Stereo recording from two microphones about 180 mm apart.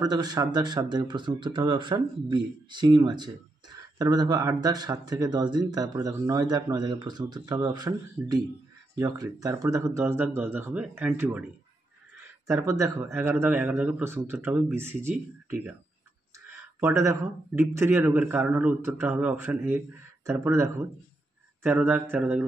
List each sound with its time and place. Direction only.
0.0 s a man's voice: 20° right (ahead or behind)
12.4 s a man's voice: 15° right (ahead or behind)
16.8 s a man's voice: 15° right (ahead or behind)